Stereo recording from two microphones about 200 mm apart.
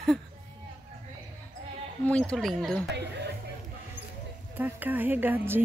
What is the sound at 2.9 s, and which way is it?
Speech, 60° right (ahead or behind).